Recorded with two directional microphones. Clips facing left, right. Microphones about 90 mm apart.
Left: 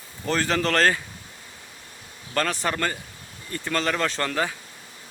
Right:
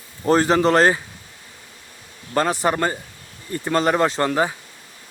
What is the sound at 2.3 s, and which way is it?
Speech, 20° right (ahead or behind).